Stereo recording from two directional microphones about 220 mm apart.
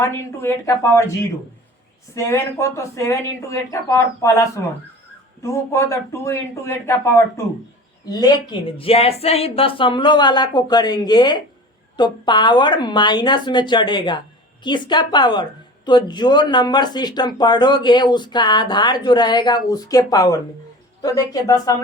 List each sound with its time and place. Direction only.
0.4 s speech: 10° left (ahead or behind)